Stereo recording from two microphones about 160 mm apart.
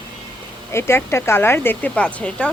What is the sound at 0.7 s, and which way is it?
Speech, 15° left (ahead or behind).